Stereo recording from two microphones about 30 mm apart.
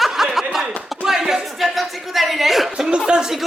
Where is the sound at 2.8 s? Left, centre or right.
Right.